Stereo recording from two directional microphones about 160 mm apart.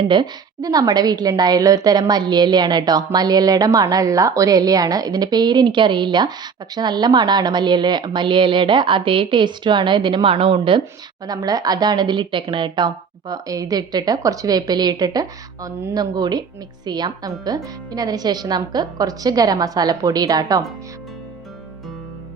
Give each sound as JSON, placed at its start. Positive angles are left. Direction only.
{"t": 0.1, "sound": "a woman's voice", "side_deg": -25}